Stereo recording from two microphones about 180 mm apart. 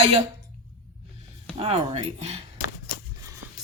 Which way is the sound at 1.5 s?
35° right (ahead or behind).